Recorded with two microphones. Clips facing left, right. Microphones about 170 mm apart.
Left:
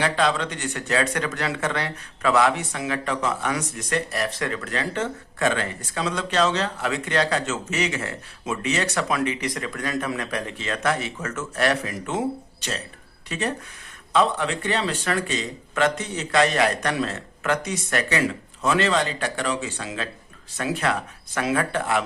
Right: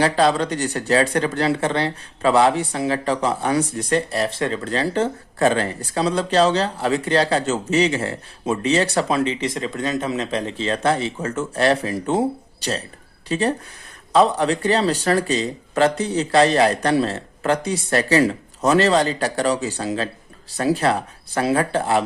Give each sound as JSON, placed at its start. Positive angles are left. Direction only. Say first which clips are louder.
{"t": 0.0, "sound": "speech", "louder": "right 5 dB", "side_deg": -35}